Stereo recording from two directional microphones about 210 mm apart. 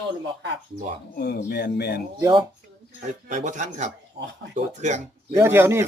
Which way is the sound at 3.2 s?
35° right (ahead or behind).